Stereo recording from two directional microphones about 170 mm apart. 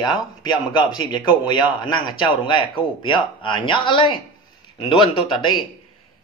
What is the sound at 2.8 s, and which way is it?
A man's voice, 30° left (ahead or behind).